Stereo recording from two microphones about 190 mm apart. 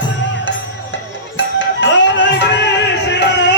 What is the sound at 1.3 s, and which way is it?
Music, 70° left (ahead or behind).